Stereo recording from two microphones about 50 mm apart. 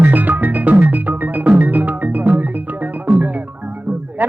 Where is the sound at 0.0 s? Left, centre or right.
Right.